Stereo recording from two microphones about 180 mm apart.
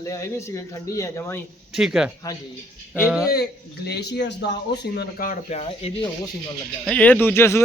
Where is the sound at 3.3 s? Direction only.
65° left (ahead or behind).